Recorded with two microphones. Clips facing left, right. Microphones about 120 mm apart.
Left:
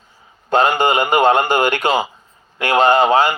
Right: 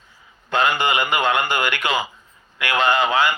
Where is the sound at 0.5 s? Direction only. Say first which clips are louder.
Left 5 dB; 40° left (ahead or behind).